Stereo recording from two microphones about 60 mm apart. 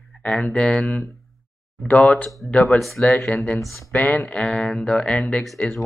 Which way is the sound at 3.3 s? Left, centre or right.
Left.